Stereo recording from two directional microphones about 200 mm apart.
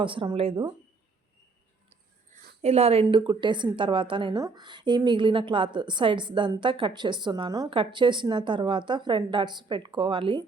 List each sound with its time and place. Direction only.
0.0 s a woman's voice: 25° right (ahead or behind)
2.6 s a woman's voice: 30° right (ahead or behind)